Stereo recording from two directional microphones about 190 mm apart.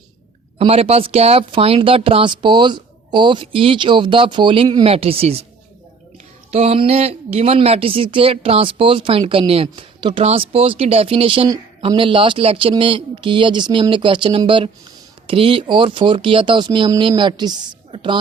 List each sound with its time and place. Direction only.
0.6 s speech: 30° right (ahead or behind)
6.5 s speech: 30° right (ahead or behind)